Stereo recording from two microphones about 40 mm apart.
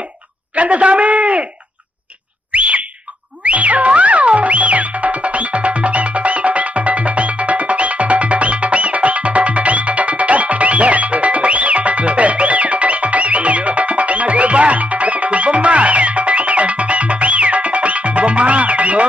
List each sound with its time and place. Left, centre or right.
0.6 s a man's voice: right
2.5 s bird: right
3.4 s music: right